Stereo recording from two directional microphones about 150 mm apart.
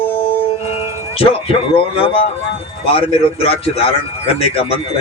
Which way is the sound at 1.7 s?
40° left (ahead or behind).